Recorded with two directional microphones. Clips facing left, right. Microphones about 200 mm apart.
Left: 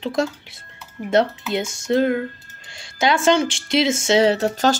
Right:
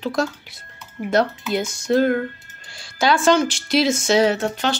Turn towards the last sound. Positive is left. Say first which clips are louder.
# left 3 dB
turn(degrees=40)  # may be behind; listen again after turning